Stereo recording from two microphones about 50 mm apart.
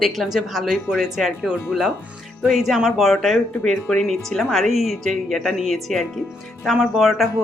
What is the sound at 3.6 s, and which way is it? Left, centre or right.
Speech, left.